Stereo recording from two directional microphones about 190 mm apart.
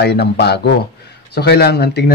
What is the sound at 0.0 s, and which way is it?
A man's voice, 60° left (ahead or behind).